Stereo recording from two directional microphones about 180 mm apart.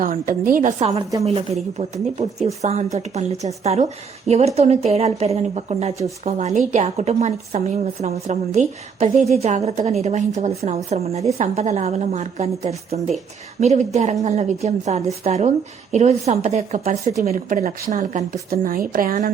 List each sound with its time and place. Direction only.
0.0 s a woman's voice: 50° right (ahead or behind)
1.2 s a woman's voice: 35° right (ahead or behind)